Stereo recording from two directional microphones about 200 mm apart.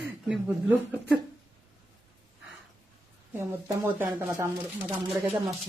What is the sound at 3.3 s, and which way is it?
A woman's voice, 10° right (ahead or behind).